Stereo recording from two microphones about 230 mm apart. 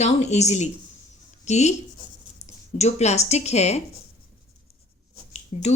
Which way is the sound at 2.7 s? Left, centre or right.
Left.